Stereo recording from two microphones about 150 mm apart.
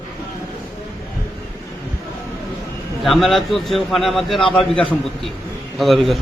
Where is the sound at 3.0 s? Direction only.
Centre (ahead or behind).